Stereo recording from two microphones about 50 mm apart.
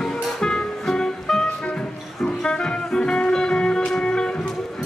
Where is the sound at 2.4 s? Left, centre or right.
Centre.